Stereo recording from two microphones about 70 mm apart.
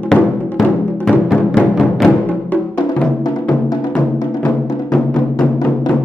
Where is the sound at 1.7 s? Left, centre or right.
Centre.